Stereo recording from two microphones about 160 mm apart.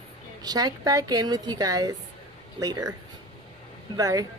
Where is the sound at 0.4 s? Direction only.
25° right (ahead or behind).